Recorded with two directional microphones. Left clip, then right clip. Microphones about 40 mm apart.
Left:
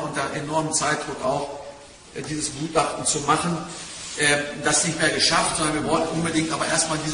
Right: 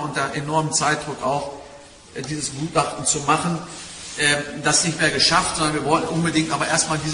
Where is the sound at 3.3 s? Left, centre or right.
Right.